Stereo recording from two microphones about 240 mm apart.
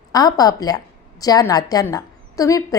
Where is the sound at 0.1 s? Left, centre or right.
Centre.